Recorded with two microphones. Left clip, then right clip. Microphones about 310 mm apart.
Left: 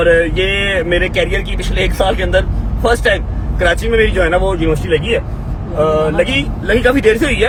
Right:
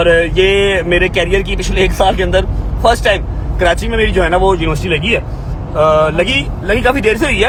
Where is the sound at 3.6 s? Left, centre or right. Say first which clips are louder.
Even; centre.